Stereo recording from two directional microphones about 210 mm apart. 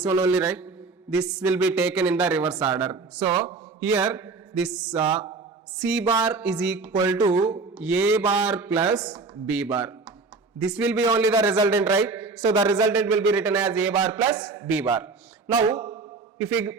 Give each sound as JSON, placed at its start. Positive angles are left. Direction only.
{"t": 0.1, "sound": "speech", "side_deg": -10}
{"t": 6.9, "sound": "speech", "side_deg": -15}
{"t": 9.5, "sound": "a man's voice", "side_deg": -5}
{"t": 12.5, "sound": "a man's voice", "side_deg": -20}
{"t": 12.9, "sound": "a man's voice", "side_deg": -10}